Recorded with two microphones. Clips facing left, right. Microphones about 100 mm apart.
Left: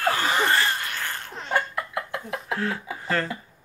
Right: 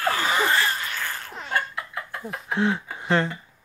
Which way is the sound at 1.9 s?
85° left.